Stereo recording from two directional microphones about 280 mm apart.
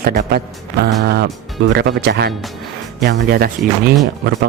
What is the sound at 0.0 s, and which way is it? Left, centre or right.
Speech, right.